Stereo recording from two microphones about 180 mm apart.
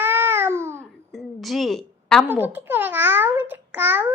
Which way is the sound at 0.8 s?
Centre (ahead or behind).